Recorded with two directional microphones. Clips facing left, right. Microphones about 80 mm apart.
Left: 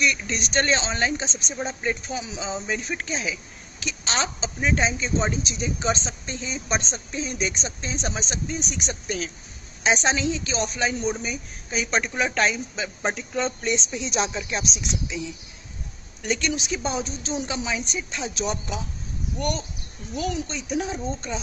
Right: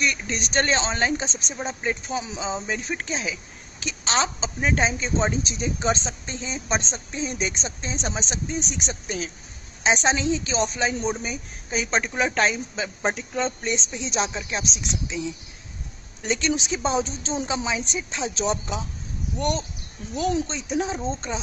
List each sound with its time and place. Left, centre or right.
0.0 s speech: right
1.6 s speech: centre
2.0 s a woman's voice: right
16.2 s a woman's voice: right